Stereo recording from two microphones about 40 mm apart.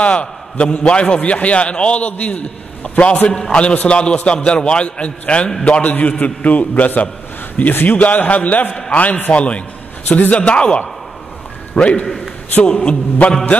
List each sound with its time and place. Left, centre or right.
0.0 s a man's voice: left
5.7 s a man's voice: left
9.3 s a man's voice: left
10.0 s a man's voice: left